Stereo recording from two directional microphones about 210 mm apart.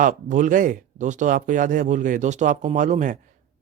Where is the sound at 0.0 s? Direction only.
35° right (ahead or behind).